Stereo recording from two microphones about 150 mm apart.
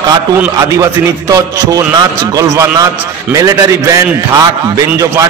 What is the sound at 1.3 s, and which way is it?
A man's voice, 25° right (ahead or behind).